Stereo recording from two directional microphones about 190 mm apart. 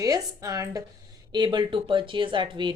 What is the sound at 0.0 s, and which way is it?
A woman's voice, 20° right (ahead or behind).